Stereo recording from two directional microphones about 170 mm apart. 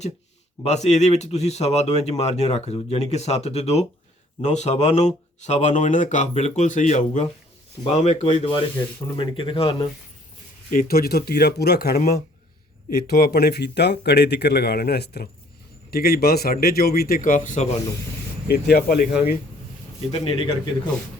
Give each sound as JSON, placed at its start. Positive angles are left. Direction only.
{"t": 0.6, "sound": "speech", "side_deg": 40}
{"t": 10.7, "sound": "a man's voice", "side_deg": 60}
{"t": 18.4, "sound": "speech", "side_deg": 70}
{"t": 20.1, "sound": "speech", "side_deg": 35}